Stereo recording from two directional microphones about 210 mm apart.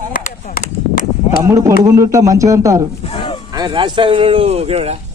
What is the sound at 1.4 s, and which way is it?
Speech, 15° right (ahead or behind).